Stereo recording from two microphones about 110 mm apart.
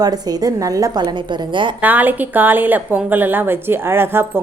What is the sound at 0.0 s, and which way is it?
A woman's voice, 35° right (ahead or behind).